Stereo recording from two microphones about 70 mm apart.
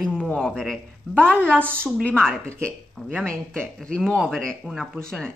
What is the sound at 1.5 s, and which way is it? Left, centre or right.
Speech, right.